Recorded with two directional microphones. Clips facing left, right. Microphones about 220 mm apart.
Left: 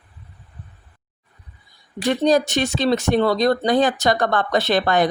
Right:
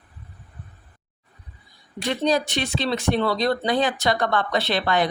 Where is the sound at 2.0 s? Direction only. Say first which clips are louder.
Left 5 dB; 45° left (ahead or behind).